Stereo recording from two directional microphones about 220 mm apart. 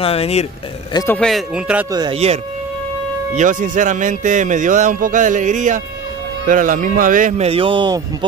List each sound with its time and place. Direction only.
0.0 s speech: 25° left (ahead or behind)
0.9 s speech: 10° left (ahead or behind)
1.9 s speech: 20° right (ahead or behind)
3.3 s speech: 35° right (ahead or behind)